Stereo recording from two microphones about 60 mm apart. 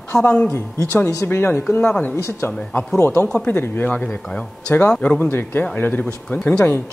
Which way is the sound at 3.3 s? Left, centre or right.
Left.